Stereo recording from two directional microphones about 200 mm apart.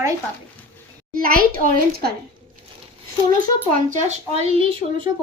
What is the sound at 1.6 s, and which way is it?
Speech, 45° right (ahead or behind).